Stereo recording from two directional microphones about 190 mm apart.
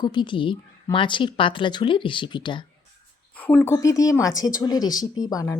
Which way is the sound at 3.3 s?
10° left (ahead or behind).